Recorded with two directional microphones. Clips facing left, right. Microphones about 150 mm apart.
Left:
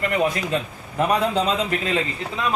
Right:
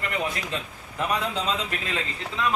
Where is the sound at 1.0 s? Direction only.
40° left (ahead or behind).